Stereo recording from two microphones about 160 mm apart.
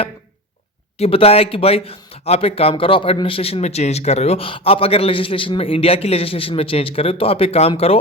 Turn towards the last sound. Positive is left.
turn(degrees=40)  # may be behind; listen again after turning